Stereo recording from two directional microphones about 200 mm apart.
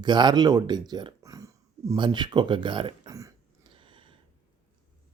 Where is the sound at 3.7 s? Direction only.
25° right (ahead or behind).